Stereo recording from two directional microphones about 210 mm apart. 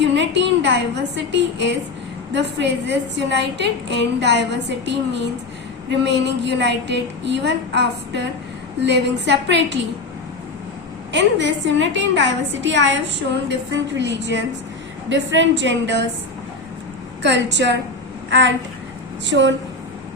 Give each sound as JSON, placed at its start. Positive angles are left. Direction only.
{"t": 0.0, "sound": "a woman's voice", "side_deg": -60}
{"t": 11.1, "sound": "a woman's voice", "side_deg": -60}
{"t": 17.2, "sound": "a woman's voice", "side_deg": -55}